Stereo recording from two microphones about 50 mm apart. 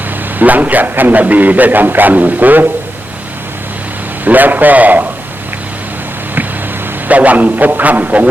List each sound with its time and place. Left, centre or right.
0.3 s a man's voice: right
4.3 s a man's voice: right
7.1 s a man's voice: right